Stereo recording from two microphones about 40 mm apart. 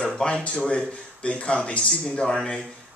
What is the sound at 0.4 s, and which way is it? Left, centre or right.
Speech, left.